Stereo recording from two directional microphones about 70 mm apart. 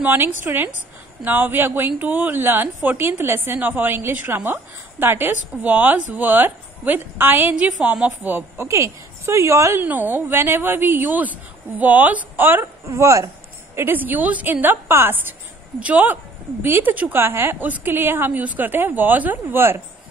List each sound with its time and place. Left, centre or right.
0.0 s a woman's voice: right
8.6 s speech: right
9.8 s a woman's voice: right
12.9 s speech: right
13.7 s a woman's voice: right
15.8 s a woman's voice: right